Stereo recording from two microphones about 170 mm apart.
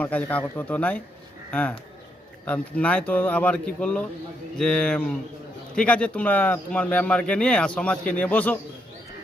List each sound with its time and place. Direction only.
0.0 s speech: 10° left (ahead or behind)